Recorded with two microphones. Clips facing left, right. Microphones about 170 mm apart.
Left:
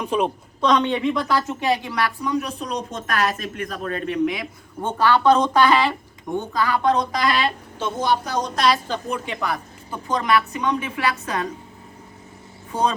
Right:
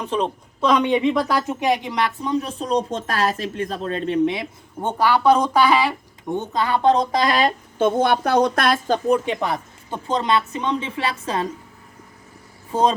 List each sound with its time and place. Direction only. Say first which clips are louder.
0.0 s a woman's voice: left 1 dB; 10° left (ahead or behind)
0.6 s a woman's voice: right 2 dB; 5° right (ahead or behind)
6.3 s speech: right 1 dB; 20° right (ahead or behind)
7.3 s a woman's voice: right 2 dB; 45° right (ahead or behind)
9.2 s speech: right 3 dB; 25° right (ahead or behind)